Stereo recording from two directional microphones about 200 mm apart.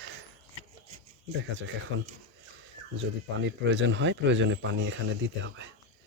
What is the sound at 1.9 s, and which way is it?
Speech, 65° right (ahead or behind).